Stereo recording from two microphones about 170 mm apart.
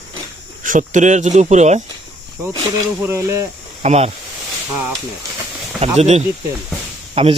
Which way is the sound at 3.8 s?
40° right (ahead or behind).